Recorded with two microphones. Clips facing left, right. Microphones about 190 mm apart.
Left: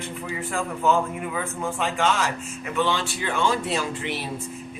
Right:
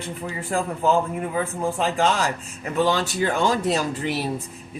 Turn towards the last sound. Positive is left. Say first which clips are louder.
# right 3 dB
turn(degrees=-40)  # may be behind; listen again after turning